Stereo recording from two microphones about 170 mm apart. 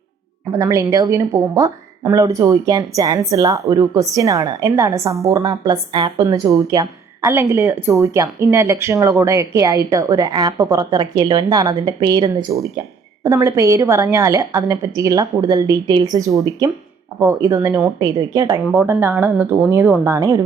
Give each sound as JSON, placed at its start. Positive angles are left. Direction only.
{"t": 0.5, "sound": "speech", "side_deg": -20}